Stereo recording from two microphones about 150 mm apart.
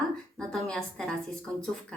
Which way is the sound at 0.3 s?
5° left (ahead or behind).